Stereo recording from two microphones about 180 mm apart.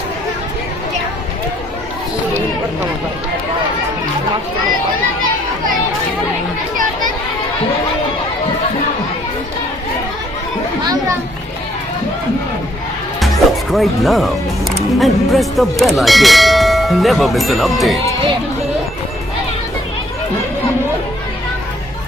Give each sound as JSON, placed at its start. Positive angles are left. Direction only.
{"t": 10.8, "sound": "children playing", "side_deg": -20}
{"t": 13.1, "sound": "music", "side_deg": 0}
{"t": 14.9, "sound": "church bell", "side_deg": 0}